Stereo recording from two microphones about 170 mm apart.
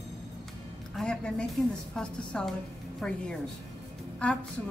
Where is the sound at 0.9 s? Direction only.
5° left (ahead or behind).